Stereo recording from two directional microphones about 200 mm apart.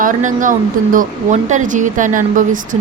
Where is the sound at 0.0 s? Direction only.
40° right (ahead or behind).